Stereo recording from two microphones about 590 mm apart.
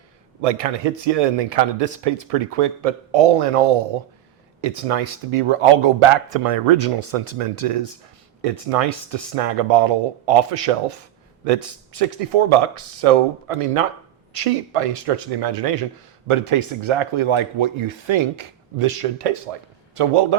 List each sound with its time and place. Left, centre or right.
0.4 s speech: right